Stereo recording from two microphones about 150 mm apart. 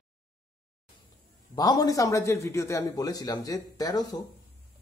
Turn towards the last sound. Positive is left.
turn(degrees=25)  # may be behind; listen again after turning